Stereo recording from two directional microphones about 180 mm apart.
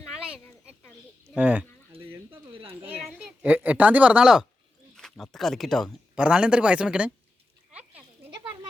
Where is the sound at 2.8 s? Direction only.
10° right (ahead or behind).